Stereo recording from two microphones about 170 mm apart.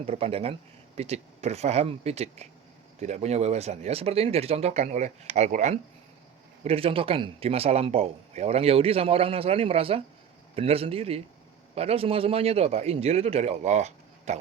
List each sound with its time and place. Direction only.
0.0 s speech: 35° right (ahead or behind)